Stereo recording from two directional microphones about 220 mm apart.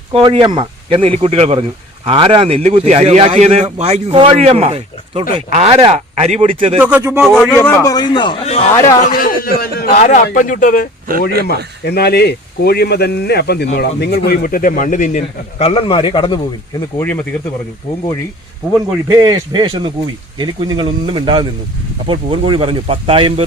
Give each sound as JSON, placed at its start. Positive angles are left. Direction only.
{"t": 0.1, "sound": "speech", "side_deg": -20}
{"t": 6.7, "sound": "speech", "side_deg": -10}
{"t": 7.3, "sound": "a man's voice", "side_deg": 5}
{"t": 8.7, "sound": "a man's voice", "side_deg": 15}
{"t": 9.0, "sound": "a man's voice", "side_deg": 40}
{"t": 11.1, "sound": "speech", "side_deg": -40}
{"t": 11.9, "sound": "speech", "side_deg": 45}
{"t": 19.0, "sound": "speech", "side_deg": -20}